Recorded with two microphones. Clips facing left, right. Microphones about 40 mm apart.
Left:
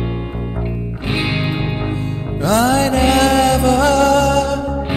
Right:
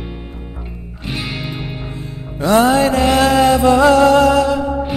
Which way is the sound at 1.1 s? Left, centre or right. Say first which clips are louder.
Left 5 dB; left.